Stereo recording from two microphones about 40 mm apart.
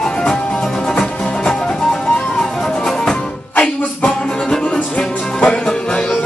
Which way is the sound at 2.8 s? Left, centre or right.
Centre.